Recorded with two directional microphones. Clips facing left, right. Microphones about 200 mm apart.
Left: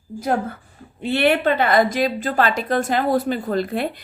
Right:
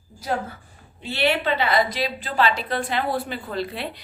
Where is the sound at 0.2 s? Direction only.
55° left (ahead or behind).